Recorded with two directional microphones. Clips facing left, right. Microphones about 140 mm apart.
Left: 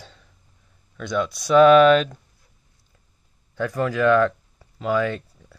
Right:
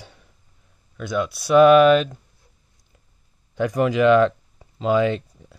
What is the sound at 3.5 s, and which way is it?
Speech, 15° right (ahead or behind).